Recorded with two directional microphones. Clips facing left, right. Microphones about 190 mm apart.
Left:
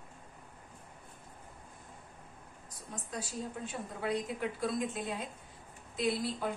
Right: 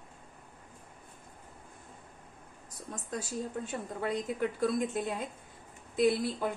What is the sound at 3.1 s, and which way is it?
A woman's voice, 50° right (ahead or behind).